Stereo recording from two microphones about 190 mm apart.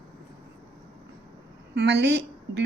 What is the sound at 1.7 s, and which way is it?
Speech, 65° right (ahead or behind).